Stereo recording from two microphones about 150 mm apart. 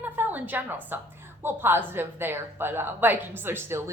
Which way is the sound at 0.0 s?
10° right (ahead or behind).